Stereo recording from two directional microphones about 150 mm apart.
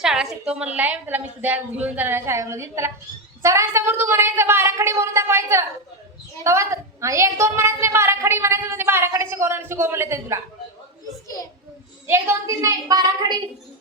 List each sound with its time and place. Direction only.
0.0 s a woman's voice: 5° right (ahead or behind); by 10.4 s 20° right (ahead or behind)
12.0 s a woman's voice: 15° right (ahead or behind)